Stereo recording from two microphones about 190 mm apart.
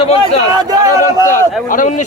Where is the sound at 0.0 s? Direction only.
30° left (ahead or behind).